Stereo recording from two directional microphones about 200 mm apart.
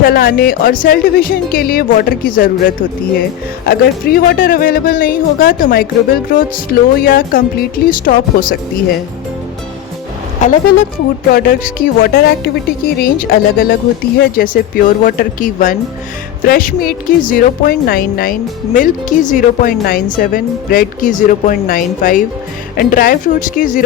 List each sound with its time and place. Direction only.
0.0 s a woman's voice: 45° left (ahead or behind)
10.4 s a woman's voice: 35° left (ahead or behind)